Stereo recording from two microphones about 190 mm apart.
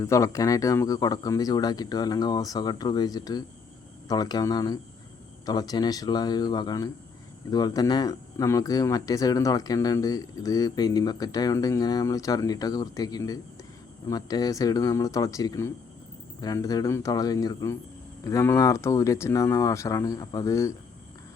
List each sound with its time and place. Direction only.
0.0 s speech: 15° left (ahead or behind)